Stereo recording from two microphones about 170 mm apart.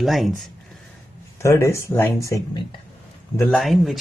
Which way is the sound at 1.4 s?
15° left (ahead or behind).